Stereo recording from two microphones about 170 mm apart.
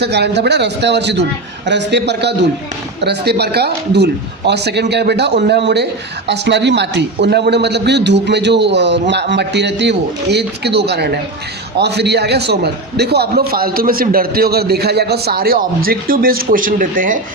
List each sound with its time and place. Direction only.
0.0 s a man's voice: 80° right
3.0 s a man's voice: 75° right (ahead or behind); by 17.2 s 55° right (ahead or behind)